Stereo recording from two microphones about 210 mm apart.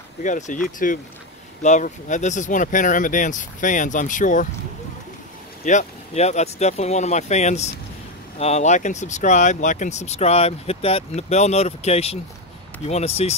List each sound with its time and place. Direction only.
0.2 s speech: 35° left (ahead or behind)
5.7 s speech: 35° left (ahead or behind)